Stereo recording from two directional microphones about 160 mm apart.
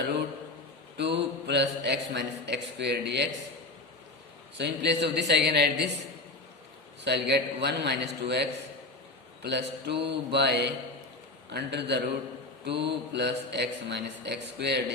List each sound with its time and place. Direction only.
0.9 s speech: 90° right
4.5 s speech: 90° right
7.0 s speech: 90° right